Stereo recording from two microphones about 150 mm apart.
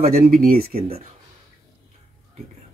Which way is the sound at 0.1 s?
70° right (ahead or behind).